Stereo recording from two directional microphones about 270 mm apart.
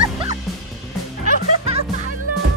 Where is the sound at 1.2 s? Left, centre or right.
Right.